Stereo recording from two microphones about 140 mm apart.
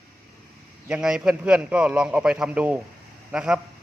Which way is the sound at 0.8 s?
5° right (ahead or behind).